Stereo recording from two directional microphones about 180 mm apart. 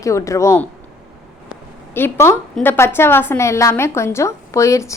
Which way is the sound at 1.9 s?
15° left (ahead or behind).